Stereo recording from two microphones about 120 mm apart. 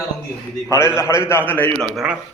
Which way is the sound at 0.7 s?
20° left (ahead or behind).